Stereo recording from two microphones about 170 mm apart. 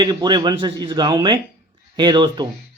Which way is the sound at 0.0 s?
25° right (ahead or behind).